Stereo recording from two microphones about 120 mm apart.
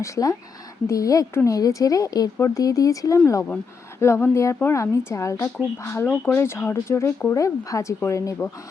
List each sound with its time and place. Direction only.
0.0 s speech: 30° left (ahead or behind)